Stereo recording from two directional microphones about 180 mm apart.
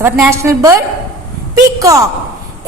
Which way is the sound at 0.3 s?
15° right (ahead or behind).